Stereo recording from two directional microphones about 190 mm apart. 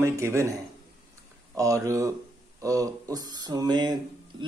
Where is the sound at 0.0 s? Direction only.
15° right (ahead or behind).